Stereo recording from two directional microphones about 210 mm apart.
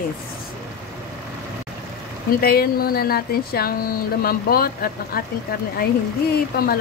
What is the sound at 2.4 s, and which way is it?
Speech, 45° left (ahead or behind).